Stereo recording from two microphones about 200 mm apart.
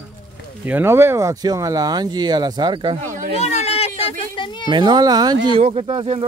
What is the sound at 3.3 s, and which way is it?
A child's voice, 35° left (ahead or behind).